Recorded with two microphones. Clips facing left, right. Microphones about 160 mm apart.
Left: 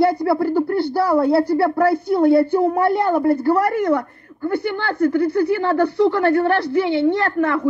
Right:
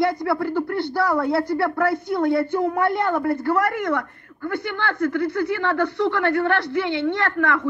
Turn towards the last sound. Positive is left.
turn(degrees=35)  # may be behind; listen again after turning